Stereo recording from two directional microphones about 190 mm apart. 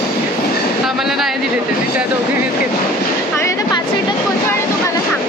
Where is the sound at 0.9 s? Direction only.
Centre (ahead or behind).